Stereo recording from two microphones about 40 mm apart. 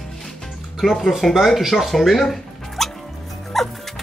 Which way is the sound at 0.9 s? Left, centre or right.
Centre.